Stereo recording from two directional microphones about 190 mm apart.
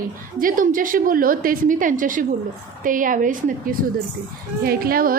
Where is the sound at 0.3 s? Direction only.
45° right (ahead or behind).